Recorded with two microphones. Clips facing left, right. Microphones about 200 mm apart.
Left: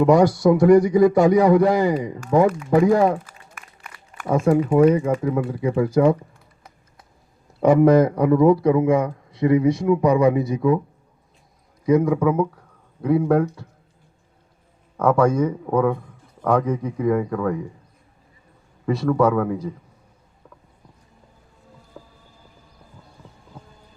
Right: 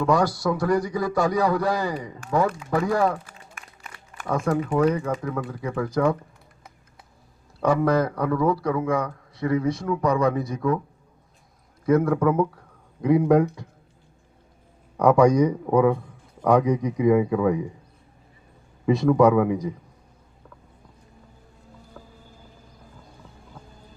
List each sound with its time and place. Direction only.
0.0 s a man's voice: 20° left (ahead or behind)
4.4 s speech: 15° left (ahead or behind)
7.6 s a man's voice: 20° left (ahead or behind)
11.9 s speech: 15° left (ahead or behind)
13.0 s speech: 10° right (ahead or behind)
14.9 s a man's voice: 15° right (ahead or behind)
18.9 s speech: 15° right (ahead or behind)
22.0 s music: 10° left (ahead or behind)